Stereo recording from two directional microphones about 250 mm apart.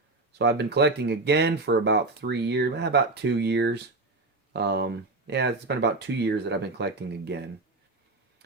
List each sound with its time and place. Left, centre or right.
0.3 s speech: right